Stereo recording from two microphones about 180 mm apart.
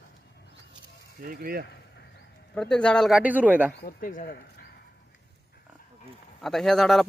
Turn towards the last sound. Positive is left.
turn(degrees=0)  # may be behind; listen again after turning